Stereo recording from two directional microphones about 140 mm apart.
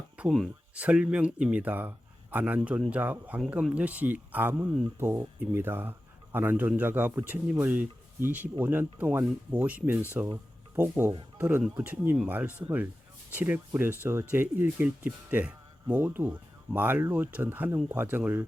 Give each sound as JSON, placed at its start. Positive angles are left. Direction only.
{"t": 0.2, "sound": "speech", "side_deg": 0}